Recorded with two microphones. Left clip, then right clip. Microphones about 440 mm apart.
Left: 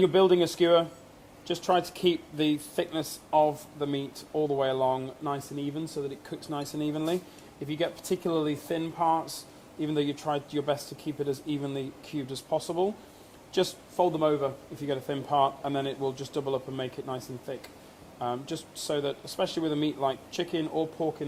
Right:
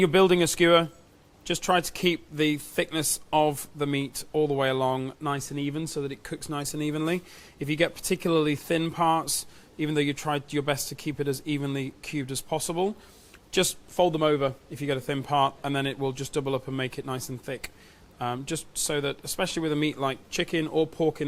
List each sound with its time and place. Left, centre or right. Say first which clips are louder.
0.0 s speech: right 1 dB; right
9.8 s speech: right 2 dB; right